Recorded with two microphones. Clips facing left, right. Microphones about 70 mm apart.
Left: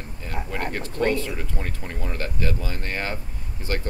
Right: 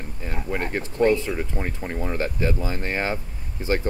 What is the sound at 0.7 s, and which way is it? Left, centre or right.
Speech, centre.